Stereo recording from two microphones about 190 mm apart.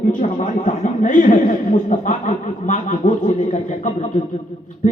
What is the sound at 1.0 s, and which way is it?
Speech, 45° left (ahead or behind).